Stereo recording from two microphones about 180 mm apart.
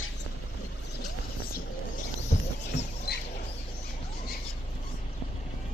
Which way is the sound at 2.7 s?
75° left (ahead or behind).